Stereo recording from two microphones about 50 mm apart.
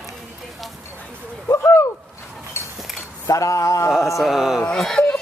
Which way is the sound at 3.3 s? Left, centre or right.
Left.